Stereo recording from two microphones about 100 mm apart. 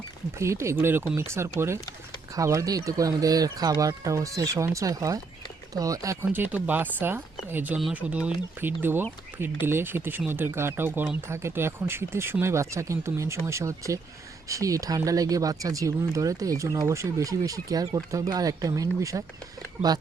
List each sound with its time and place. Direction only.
0.3 s speech: 30° right (ahead or behind)
6.3 s speech: 20° right (ahead or behind)